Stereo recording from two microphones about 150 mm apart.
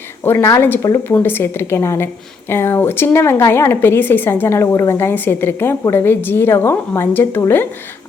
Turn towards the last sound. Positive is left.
turn(degrees=15)  # may be behind; listen again after turning